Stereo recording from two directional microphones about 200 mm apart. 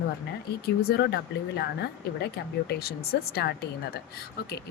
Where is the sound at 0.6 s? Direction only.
50° left (ahead or behind).